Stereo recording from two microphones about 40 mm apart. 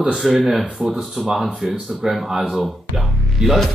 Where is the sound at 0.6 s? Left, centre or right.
Right.